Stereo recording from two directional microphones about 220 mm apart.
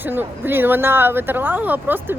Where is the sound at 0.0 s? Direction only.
10° right (ahead or behind).